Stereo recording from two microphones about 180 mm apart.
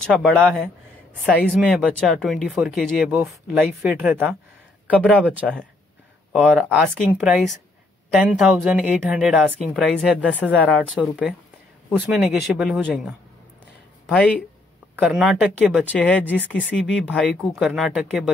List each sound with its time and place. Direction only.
0.1 s speech: centre (ahead or behind)
1.5 s speech: 5° right (ahead or behind)
15.9 s speech: 10° left (ahead or behind)